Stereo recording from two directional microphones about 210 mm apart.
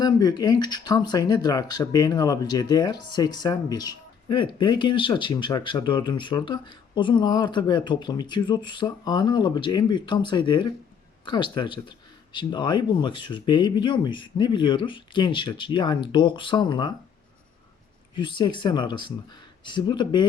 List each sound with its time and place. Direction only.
0.0 s speech: 20° left (ahead or behind)
18.1 s speech: 20° left (ahead or behind)